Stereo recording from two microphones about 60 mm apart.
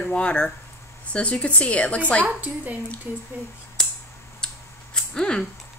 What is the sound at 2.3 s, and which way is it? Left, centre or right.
Speech, right.